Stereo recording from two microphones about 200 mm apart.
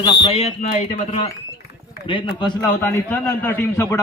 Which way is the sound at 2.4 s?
20° left (ahead or behind).